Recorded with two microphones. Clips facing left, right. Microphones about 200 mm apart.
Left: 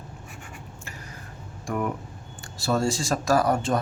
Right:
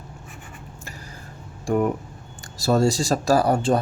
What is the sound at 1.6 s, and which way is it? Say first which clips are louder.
Speech: right 7 dB; 30° right (ahead or behind).